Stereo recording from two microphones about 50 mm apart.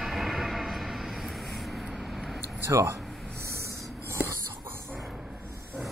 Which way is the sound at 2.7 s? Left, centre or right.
Right.